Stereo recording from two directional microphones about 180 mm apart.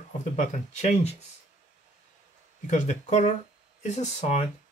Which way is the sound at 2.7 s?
40° left (ahead or behind).